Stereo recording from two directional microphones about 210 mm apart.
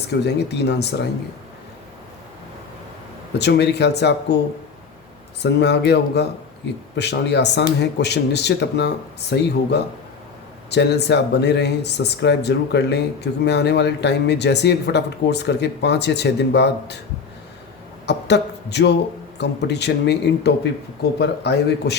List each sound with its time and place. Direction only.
0.3 s speech: 55° left (ahead or behind)
3.3 s speech: 55° left (ahead or behind)
5.4 s speech: 55° left (ahead or behind)
18.0 s speech: 55° left (ahead or behind)